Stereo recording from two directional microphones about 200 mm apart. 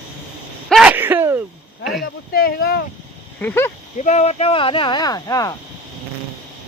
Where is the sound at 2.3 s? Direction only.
50° left (ahead or behind).